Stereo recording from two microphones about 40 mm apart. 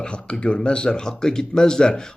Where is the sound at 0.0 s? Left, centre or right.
Left.